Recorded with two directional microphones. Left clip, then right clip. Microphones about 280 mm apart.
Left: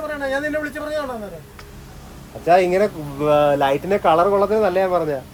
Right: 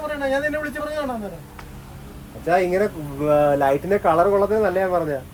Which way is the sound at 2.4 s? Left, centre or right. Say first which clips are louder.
Left 4 dB; centre.